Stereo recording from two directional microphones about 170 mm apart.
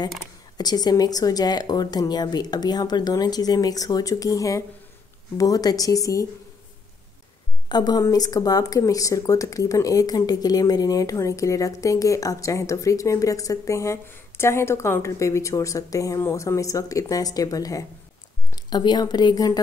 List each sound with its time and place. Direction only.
0.6 s speech: 25° left (ahead or behind)
7.6 s a woman's voice: 25° left (ahead or behind)